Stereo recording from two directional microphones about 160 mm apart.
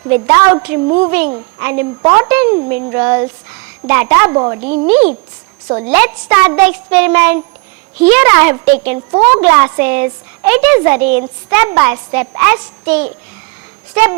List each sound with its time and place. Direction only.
0.1 s a woman's voice: 10° right (ahead or behind)